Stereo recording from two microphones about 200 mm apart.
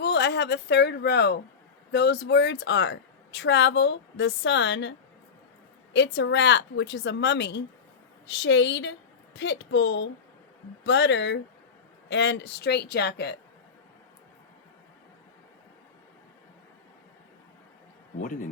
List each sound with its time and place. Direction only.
0.0 s speech: 60° left (ahead or behind)
18.2 s speech: 40° left (ahead or behind)